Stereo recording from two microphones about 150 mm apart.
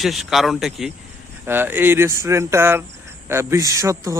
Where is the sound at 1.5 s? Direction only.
15° right (ahead or behind).